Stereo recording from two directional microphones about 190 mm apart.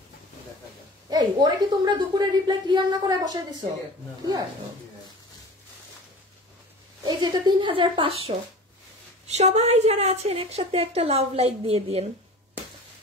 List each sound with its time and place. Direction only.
1.1 s a woman's voice: 20° right (ahead or behind)
7.1 s speech: 20° right (ahead or behind)
9.3 s a woman's voice: 35° right (ahead or behind)